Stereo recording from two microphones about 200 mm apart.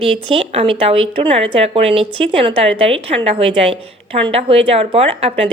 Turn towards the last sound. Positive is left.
turn(degrees=-30)  # may be behind; listen again after turning